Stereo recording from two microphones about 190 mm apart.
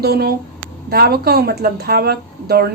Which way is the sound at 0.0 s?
55° right (ahead or behind).